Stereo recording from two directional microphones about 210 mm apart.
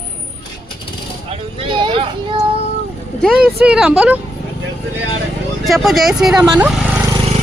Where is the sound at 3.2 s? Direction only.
5° right (ahead or behind).